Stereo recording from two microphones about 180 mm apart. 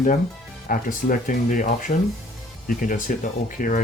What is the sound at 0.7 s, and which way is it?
Speech, 50° left (ahead or behind).